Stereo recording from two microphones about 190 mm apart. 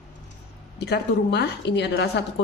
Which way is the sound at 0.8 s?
60° left (ahead or behind).